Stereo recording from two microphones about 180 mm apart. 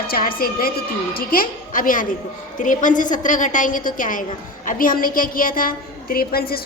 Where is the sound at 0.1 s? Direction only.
55° left (ahead or behind).